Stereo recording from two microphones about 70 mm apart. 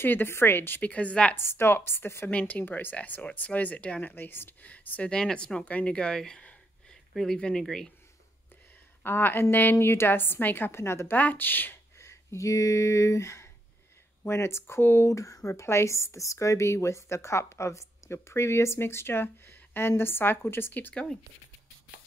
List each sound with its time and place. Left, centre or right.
0.0 s speech: left
1.3 s a woman's voice: left
2.3 s speech: left
4.1 s speech: left; by 7.9 s centre
9.0 s a woman's voice: left
11.1 s speech: left
12.0 s a woman's voice: left
20.9 s speech: centre